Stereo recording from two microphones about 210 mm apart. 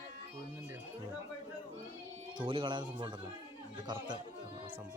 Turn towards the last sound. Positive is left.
turn(degrees=-20)  # may be behind; listen again after turning